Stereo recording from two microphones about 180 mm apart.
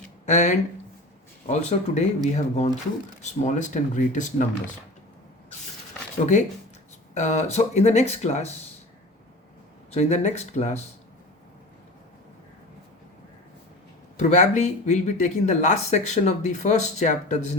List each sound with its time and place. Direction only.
0.3 s speech: 40° left (ahead or behind)
7.1 s speech: 40° left (ahead or behind)
9.9 s speech: 40° left (ahead or behind)
14.2 s speech: 40° left (ahead or behind)